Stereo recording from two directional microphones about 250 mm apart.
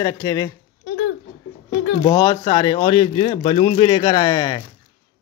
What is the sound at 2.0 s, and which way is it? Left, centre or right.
A man's voice, centre.